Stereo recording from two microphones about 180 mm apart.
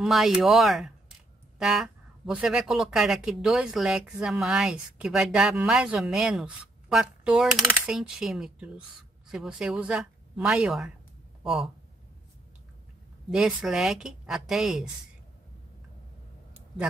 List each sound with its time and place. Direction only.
0.0 s speech: centre (ahead or behind)
13.3 s speech: 5° right (ahead or behind)